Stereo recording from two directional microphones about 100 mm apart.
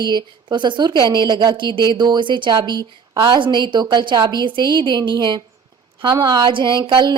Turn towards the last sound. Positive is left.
turn(degrees=-50)  # may be behind; listen again after turning